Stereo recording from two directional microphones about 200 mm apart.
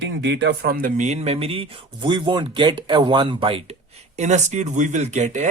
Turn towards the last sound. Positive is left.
turn(degrees=-35)  # may be behind; listen again after turning